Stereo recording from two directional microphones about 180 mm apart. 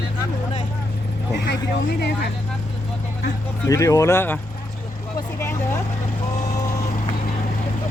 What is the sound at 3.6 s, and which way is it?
Speech, 20° left (ahead or behind).